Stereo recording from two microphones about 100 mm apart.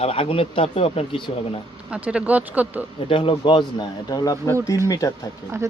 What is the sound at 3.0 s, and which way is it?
Speech, 60° left (ahead or behind).